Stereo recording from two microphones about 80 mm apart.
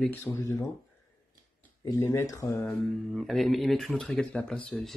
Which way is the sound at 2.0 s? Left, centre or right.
Left.